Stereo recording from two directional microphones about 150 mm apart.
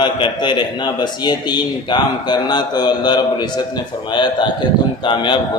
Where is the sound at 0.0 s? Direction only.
30° left (ahead or behind).